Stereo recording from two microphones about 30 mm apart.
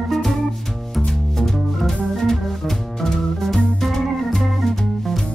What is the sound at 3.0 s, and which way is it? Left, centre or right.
Music, centre.